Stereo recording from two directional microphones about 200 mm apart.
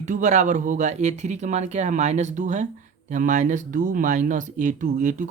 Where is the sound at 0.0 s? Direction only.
40° right (ahead or behind).